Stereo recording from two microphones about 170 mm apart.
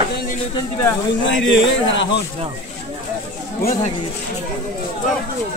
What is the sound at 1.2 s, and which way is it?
Speech, 90° left.